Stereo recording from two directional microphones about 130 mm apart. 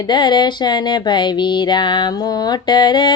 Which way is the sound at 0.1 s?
35° left (ahead or behind).